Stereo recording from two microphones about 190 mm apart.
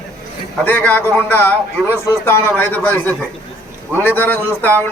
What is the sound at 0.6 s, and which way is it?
A man's voice, 10° left (ahead or behind).